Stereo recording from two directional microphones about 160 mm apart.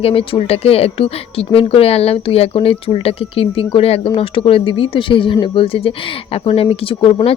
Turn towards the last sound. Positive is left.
turn(degrees=35)  # may be behind; listen again after turning